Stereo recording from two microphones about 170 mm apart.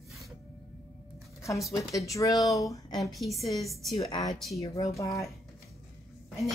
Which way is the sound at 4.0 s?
25° left (ahead or behind).